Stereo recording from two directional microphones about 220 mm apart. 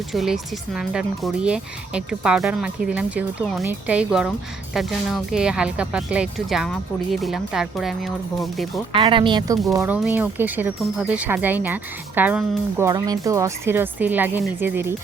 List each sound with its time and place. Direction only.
0.1 s speech: centre (ahead or behind)
8.9 s speech: 25° right (ahead or behind)
9.7 s speech: 10° right (ahead or behind)